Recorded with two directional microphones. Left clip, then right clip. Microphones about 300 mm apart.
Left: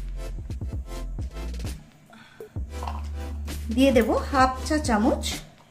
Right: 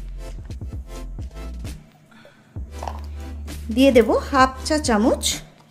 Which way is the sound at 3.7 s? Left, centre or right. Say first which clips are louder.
Right 5 dB; right.